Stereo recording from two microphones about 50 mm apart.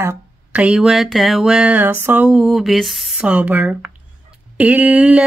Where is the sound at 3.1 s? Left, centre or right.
Right.